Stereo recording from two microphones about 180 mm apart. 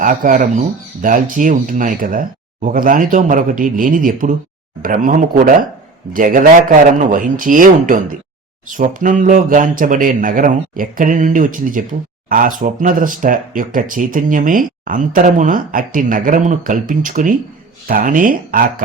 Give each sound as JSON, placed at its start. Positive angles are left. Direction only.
{"t": 0.0, "sound": "speech", "side_deg": -50}